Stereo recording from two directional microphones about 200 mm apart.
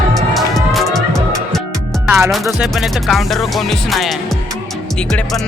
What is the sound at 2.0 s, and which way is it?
Music, 10° right (ahead or behind).